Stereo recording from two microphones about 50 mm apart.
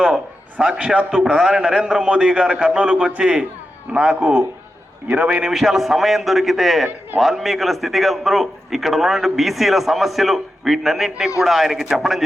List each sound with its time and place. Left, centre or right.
0.6 s a man's voice: centre
5.4 s a man's voice: centre